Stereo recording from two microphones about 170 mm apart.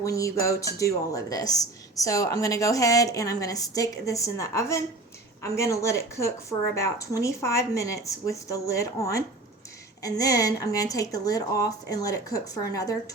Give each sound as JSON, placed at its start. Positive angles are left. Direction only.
{"t": 0.0, "sound": "a woman's voice", "side_deg": 20}